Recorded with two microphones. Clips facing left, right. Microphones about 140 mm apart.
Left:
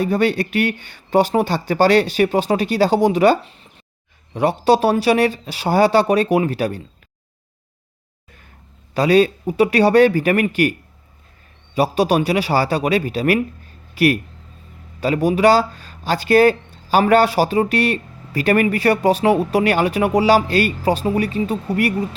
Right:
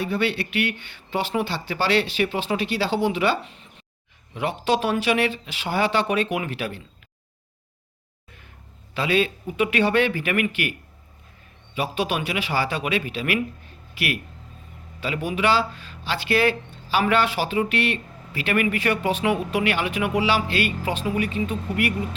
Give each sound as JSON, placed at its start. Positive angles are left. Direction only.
{"t": 0.0, "sound": "speech", "side_deg": 40}
{"t": 4.4, "sound": "speech", "side_deg": 40}
{"t": 9.0, "sound": "speech", "side_deg": 40}